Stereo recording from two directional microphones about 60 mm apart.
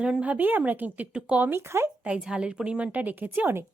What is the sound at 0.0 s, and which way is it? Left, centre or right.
A woman's voice, right.